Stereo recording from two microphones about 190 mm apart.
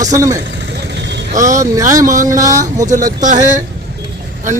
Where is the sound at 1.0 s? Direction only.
65° right (ahead or behind).